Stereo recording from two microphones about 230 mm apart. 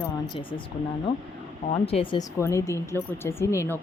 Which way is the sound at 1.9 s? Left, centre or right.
Left.